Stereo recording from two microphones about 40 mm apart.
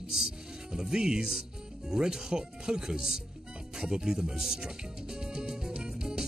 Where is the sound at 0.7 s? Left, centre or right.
Centre.